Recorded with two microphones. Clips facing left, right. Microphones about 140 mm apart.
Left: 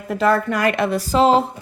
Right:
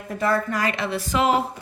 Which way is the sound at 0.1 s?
80° left.